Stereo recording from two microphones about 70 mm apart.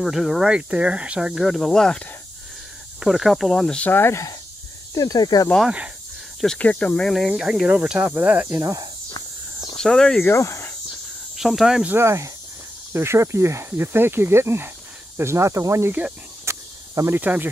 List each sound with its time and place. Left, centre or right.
0.0 s speech: centre
1.3 s speech: centre
3.0 s speech: centre
3.8 s speech: left
4.9 s speech: left
6.6 s speech: centre
7.2 s speech: centre
8.5 s speech: right
9.8 s speech: centre
10.2 s speech: left
11.3 s speech: centre
11.9 s speech: right
16.4 s cricket: right
17.1 s speech: right